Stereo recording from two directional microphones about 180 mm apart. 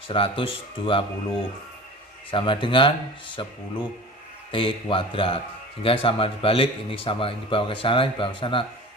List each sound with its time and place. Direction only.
0.1 s a man's voice: 30° left (ahead or behind)